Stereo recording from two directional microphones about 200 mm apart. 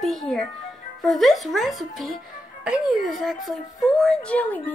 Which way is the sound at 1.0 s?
Centre (ahead or behind).